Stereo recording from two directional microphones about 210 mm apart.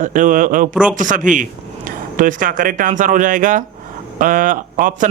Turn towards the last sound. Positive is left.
turn(degrees=-40)  # may be behind; listen again after turning